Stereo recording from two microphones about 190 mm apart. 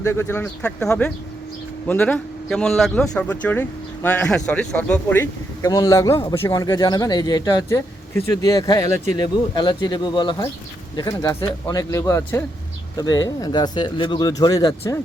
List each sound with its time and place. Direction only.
0.0 s speech: 15° left (ahead or behind)